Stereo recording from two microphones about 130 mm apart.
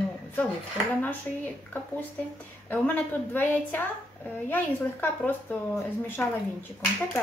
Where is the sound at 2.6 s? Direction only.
10° left (ahead or behind).